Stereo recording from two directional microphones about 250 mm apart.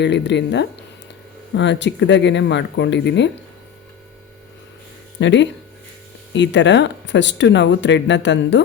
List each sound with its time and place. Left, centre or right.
0.0 s speech: left
5.2 s speech: left